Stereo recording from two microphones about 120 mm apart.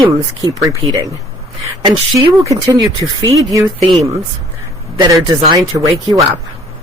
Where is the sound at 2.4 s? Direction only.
30° right (ahead or behind).